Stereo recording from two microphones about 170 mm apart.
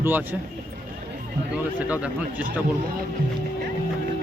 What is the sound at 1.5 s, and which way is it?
Speech, 10° right (ahead or behind).